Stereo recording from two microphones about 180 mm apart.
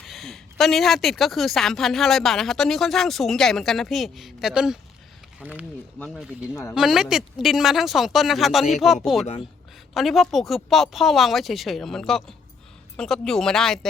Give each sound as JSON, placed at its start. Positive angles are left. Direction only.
{"t": 0.0, "sound": "speech", "side_deg": 0}
{"t": 9.2, "sound": "speech", "side_deg": 35}
{"t": 9.9, "sound": "speech", "side_deg": 0}